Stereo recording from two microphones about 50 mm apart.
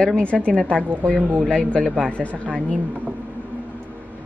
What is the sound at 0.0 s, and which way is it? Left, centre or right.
A woman's voice, centre.